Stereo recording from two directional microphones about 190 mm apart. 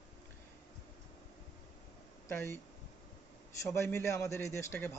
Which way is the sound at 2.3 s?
10° left (ahead or behind).